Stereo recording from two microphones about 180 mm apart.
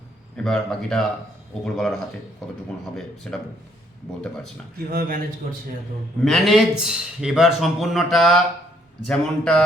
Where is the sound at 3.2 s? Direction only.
5° left (ahead or behind).